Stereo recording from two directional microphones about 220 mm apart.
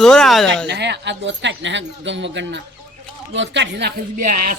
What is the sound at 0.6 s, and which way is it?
A woman's voice, 50° right (ahead or behind).